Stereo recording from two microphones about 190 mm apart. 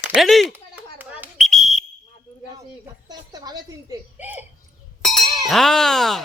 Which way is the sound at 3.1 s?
20° right (ahead or behind).